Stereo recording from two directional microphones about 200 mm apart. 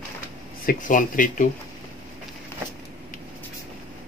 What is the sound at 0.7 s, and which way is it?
Speech, 40° left (ahead or behind).